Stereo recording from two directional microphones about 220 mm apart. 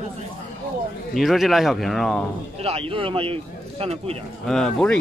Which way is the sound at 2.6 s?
25° right (ahead or behind).